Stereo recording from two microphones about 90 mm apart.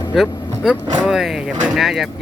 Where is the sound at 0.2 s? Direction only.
10° right (ahead or behind).